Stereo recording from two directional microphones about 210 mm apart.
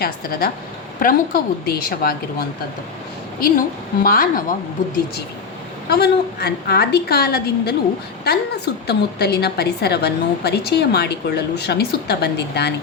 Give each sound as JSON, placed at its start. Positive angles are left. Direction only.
{"t": 0.0, "sound": "a woman's voice", "side_deg": 45}
{"t": 4.0, "sound": "a woman's voice", "side_deg": 45}
{"t": 5.9, "sound": "a woman's voice", "side_deg": 50}